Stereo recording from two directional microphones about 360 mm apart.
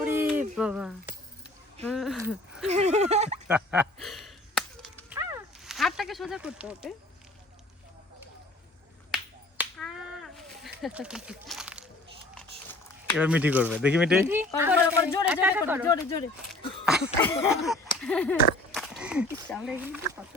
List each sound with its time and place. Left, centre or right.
0.0 s a sound: centre
1.8 s speech: centre
2.6 s speech: centre
3.4 s a sound: centre
9.1 s finger snapping: centre
10.8 s speech: centre